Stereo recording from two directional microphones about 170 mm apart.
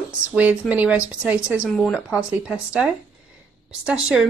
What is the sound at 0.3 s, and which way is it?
Speech, 10° right (ahead or behind).